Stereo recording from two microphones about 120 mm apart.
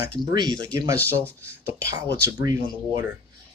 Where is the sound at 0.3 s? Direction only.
35° right (ahead or behind).